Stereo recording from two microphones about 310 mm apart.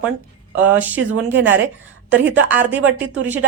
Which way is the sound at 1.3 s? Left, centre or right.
Right.